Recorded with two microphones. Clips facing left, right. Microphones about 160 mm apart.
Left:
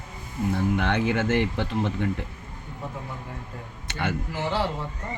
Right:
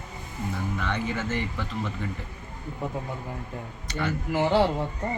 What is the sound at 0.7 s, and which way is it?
Speech, 70° left (ahead or behind).